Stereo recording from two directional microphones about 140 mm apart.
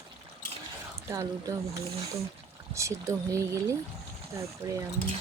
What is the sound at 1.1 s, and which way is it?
Speech, 25° right (ahead or behind).